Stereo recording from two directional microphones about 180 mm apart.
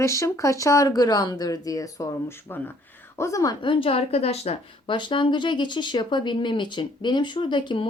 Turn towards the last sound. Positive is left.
turn(degrees=25)  # may be behind; listen again after turning